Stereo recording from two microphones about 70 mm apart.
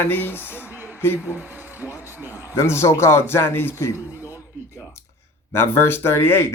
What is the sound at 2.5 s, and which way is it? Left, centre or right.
Speech, left.